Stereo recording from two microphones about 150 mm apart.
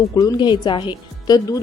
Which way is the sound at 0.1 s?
25° left (ahead or behind).